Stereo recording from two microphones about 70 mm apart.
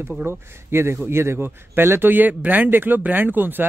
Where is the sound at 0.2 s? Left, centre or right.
Right.